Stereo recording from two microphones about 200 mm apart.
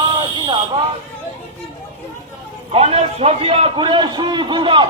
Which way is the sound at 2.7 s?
30° right (ahead or behind).